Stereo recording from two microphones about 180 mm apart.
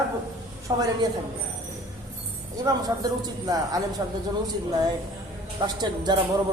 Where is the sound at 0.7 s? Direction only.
20° right (ahead or behind).